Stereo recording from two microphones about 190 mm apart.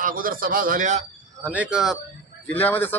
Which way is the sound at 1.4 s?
10° right (ahead or behind).